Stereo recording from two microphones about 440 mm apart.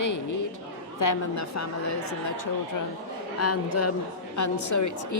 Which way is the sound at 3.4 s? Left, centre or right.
Left.